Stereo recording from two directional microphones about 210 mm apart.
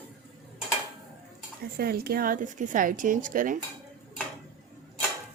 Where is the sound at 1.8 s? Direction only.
45° right (ahead or behind).